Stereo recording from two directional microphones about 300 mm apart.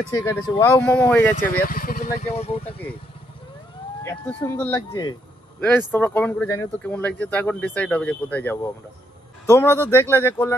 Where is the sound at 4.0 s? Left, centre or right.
Centre.